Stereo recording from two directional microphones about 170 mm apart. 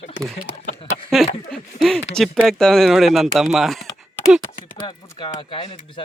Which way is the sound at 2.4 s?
Centre (ahead or behind).